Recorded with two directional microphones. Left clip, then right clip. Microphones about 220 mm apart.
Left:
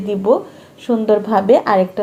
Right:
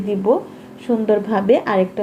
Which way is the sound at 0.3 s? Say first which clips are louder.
Left 3 dB; 20° left (ahead or behind).